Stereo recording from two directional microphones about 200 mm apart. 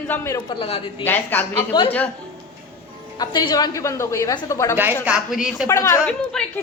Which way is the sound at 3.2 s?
20° left (ahead or behind).